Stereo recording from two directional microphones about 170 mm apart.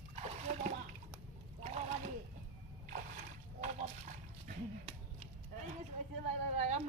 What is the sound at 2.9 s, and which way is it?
Splash, 50° right (ahead or behind).